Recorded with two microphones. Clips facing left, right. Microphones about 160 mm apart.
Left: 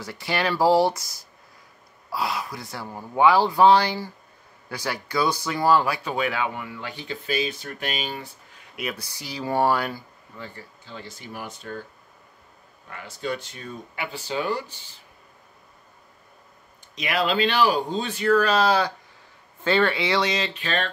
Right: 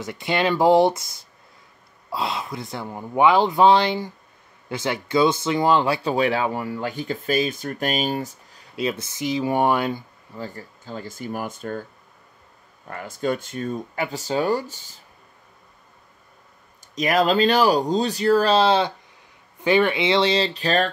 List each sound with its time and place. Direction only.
0.0 s speech: 20° right (ahead or behind)
2.0 s speech: 25° right (ahead or behind)
10.3 s speech: 40° right (ahead or behind)
12.9 s speech: 45° right (ahead or behind)
16.9 s speech: 45° right (ahead or behind)